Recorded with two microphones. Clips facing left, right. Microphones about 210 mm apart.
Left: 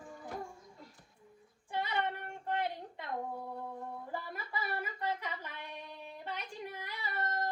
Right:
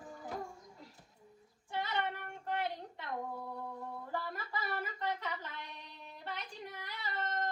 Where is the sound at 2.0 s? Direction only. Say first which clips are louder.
Left 2 dB; 20° left (ahead or behind).